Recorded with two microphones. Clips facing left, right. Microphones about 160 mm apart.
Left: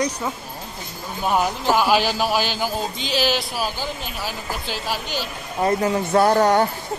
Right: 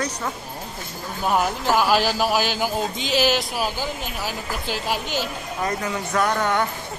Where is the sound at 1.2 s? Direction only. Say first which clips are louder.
Left 1 dB; centre (ahead or behind).